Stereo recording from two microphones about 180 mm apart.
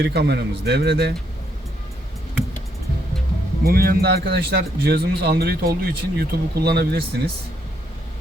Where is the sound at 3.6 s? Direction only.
55° right (ahead or behind).